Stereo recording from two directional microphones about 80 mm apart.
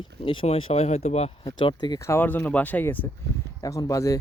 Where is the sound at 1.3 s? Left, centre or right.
Left.